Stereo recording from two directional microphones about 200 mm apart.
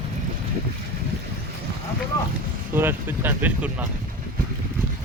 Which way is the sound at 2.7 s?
10° right (ahead or behind).